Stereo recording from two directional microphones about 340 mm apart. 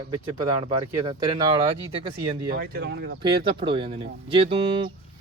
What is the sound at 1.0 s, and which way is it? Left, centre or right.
Speech, centre.